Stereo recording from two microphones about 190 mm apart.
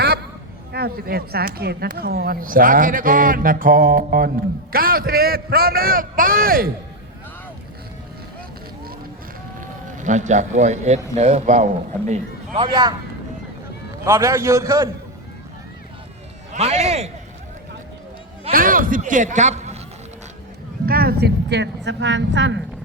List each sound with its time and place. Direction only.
0.7 s speech: 55° right (ahead or behind)
9.6 s speech: 40° right (ahead or behind)
12.6 s speech: 20° right (ahead or behind)
14.0 s a man's voice: 15° right (ahead or behind)
16.5 s a man's voice: 35° right (ahead or behind)
18.5 s speech: 45° right (ahead or behind)
20.8 s a woman's voice: 50° right (ahead or behind); by 22.6 s 75° right (ahead or behind)